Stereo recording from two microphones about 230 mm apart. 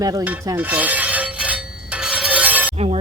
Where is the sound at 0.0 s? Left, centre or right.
Centre.